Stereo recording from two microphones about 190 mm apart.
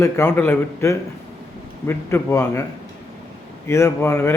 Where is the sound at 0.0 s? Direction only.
10° left (ahead or behind).